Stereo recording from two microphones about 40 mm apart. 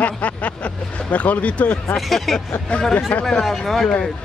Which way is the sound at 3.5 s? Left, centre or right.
Centre.